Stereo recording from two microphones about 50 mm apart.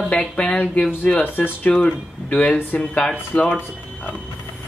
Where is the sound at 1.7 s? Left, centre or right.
Left.